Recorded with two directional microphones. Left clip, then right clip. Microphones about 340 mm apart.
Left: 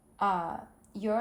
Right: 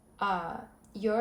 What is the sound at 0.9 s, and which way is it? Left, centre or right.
Speech, centre.